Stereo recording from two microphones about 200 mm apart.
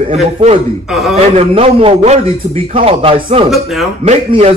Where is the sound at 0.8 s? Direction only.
Centre (ahead or behind).